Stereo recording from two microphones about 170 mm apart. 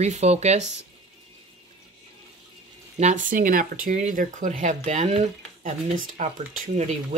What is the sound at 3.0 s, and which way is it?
Speech, 45° right (ahead or behind).